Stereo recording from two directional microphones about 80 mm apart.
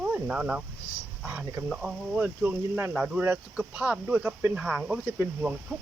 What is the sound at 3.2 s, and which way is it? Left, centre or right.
Speech, right.